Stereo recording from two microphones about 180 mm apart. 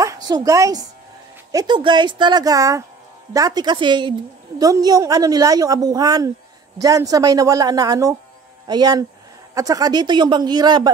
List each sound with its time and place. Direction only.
0.0 s a woman's voice: 20° right (ahead or behind)